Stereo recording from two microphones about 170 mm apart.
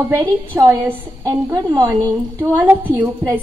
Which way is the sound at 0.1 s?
15° right (ahead or behind).